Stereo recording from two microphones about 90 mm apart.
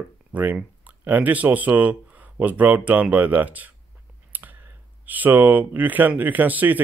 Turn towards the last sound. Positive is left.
turn(degrees=-20)  # may be behind; listen again after turning